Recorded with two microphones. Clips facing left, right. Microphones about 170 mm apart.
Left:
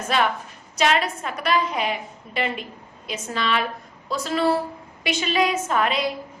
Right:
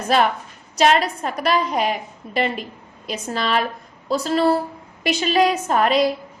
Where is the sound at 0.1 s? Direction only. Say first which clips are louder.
Right 4 dB; 40° right (ahead or behind).